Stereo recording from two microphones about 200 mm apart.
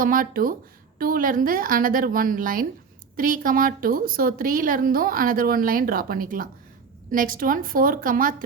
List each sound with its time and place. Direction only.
0.0 s a woman's voice: 45° right (ahead or behind)